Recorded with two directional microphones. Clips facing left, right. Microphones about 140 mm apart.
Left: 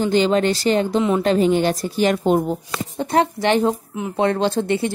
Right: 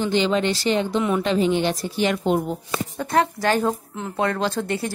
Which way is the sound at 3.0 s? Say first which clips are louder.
Left 3 dB; 25° left (ahead or behind).